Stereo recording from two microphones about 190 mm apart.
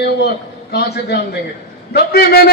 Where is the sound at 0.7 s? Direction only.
60° left (ahead or behind).